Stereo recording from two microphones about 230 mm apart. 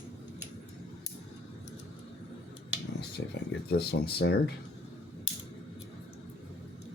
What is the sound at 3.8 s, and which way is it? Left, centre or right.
Speech, left.